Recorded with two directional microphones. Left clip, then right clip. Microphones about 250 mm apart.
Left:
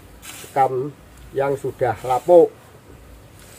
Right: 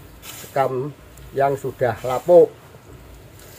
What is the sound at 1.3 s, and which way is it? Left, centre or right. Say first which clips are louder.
Speech: right 1 dB; centre.